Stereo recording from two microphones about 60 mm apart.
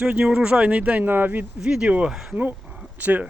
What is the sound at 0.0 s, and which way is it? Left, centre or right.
Speech, centre.